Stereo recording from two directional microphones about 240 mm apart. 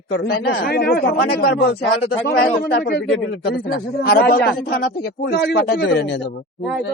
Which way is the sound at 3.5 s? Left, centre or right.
Left.